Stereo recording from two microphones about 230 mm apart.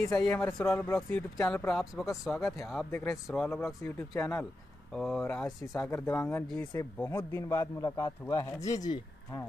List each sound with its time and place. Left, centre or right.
0.0 s a man's voice: centre